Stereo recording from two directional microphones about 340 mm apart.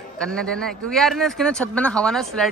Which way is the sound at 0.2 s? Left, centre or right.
Centre.